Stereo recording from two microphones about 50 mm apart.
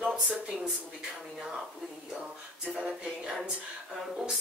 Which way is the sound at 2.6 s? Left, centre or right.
Centre.